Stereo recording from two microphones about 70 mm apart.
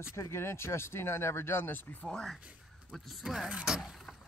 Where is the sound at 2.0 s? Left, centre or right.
Centre.